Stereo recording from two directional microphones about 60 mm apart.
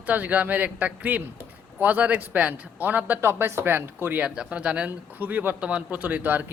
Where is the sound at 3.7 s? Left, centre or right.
Right.